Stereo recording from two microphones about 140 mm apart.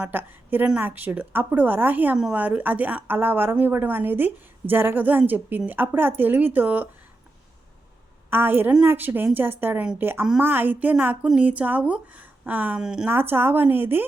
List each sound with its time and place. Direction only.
0.0 s a woman's voice: 15° right (ahead or behind)
8.3 s a woman's voice: 15° right (ahead or behind)
13.1 s a woman's voice: 15° right (ahead or behind)